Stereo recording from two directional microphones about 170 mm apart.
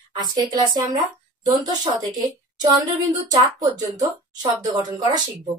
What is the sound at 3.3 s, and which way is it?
Speech, 20° right (ahead or behind).